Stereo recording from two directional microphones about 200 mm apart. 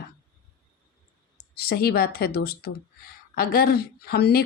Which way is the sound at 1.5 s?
50° left (ahead or behind).